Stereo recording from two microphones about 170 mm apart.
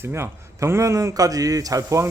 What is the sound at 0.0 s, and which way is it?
A man's voice, 15° right (ahead or behind).